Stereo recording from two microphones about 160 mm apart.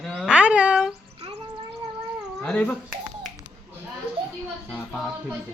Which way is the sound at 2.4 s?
5° left (ahead or behind).